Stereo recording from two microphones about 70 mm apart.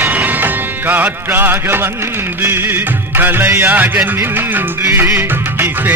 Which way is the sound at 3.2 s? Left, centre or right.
Right.